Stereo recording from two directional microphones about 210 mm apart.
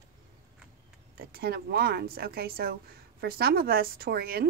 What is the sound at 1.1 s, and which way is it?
Speech, 45° right (ahead or behind).